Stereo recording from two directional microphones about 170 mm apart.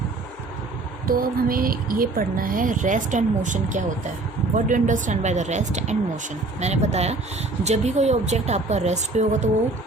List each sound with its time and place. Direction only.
1.0 s a woman's voice: 60° right (ahead or behind); by 9.5 s 40° right (ahead or behind)